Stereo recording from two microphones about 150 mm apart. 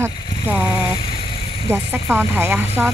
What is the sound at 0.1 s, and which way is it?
Vehicle, 30° left (ahead or behind).